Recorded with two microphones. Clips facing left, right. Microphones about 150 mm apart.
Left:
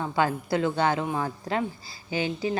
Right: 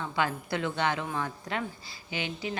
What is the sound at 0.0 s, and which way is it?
A woman's voice, 40° left (ahead or behind).